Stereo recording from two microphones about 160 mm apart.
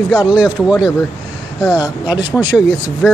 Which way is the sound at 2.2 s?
10° right (ahead or behind).